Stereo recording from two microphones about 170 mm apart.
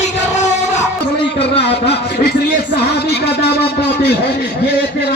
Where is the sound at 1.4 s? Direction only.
80° left.